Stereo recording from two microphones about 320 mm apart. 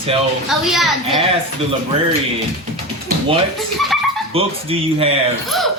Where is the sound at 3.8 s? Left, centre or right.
Centre.